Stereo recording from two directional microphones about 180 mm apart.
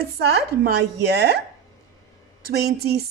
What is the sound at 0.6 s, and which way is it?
Speech, 65° right (ahead or behind).